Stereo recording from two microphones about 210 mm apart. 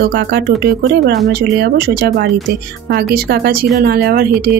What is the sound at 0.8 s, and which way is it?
A woman's voice, 50° right (ahead or behind).